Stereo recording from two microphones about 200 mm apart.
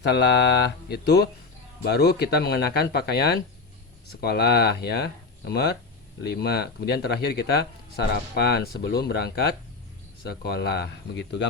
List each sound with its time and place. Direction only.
0.0 s speech: 55° left (ahead or behind)